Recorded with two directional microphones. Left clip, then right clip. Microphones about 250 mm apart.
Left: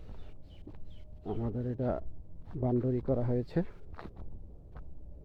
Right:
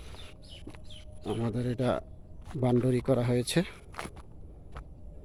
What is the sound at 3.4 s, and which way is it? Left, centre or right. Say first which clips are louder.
Speech: right 5 dB; centre.